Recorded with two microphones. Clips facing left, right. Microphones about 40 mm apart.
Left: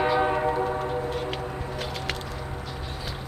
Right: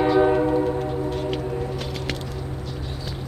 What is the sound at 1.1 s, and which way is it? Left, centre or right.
Vehicle, centre.